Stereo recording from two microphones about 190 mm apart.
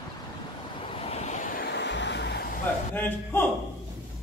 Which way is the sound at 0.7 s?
30° left (ahead or behind).